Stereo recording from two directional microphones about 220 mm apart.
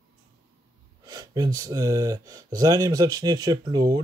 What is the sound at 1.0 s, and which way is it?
Speech, 15° right (ahead or behind).